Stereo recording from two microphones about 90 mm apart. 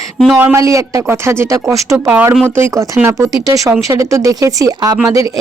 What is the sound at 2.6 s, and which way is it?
Speech, 35° right (ahead or behind).